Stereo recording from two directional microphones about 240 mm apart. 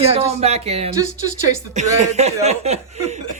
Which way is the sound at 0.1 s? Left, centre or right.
Right.